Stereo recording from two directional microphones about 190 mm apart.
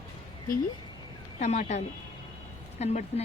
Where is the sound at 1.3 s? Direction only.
40° left (ahead or behind).